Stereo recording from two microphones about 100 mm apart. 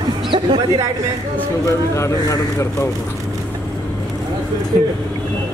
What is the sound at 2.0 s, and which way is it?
Speech, 30° left (ahead or behind).